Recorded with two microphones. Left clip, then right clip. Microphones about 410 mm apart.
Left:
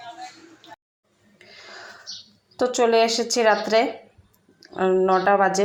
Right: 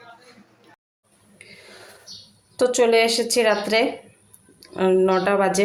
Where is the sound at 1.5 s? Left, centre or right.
Right.